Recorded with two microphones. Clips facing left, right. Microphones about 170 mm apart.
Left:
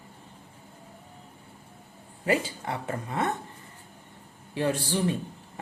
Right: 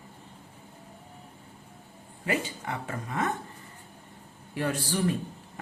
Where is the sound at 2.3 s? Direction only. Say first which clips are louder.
Left 4 dB; 35° left (ahead or behind).